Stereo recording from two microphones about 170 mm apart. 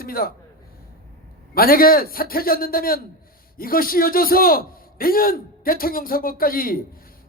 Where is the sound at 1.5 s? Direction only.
60° left (ahead or behind).